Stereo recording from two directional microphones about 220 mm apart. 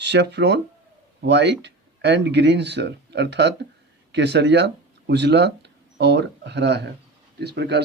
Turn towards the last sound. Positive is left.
turn(degrees=-50)  # may be behind; listen again after turning